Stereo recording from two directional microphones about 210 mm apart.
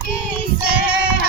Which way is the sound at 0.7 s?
5° right (ahead or behind).